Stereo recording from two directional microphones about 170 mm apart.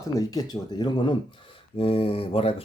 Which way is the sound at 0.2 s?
20° left (ahead or behind).